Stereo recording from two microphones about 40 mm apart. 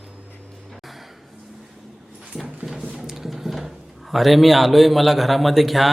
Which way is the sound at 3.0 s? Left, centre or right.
Centre.